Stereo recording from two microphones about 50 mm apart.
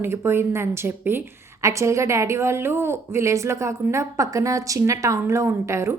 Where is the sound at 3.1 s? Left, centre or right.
Right.